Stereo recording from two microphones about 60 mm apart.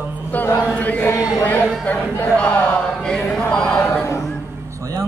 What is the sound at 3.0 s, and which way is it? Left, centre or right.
Chant, centre.